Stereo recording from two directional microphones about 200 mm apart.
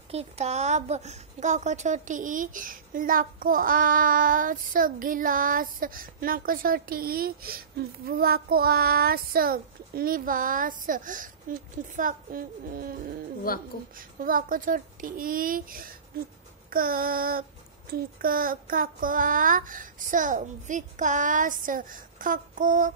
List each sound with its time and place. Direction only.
0.1 s a woman's voice: 30° right (ahead or behind)
13.5 s speech: 45° left (ahead or behind)
13.9 s a woman's voice: 45° right (ahead or behind)